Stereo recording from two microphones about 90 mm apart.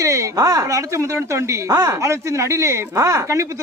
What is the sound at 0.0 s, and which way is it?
Speech, 35° right (ahead or behind).